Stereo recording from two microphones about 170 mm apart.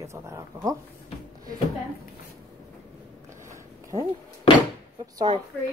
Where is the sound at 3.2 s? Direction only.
15° right (ahead or behind).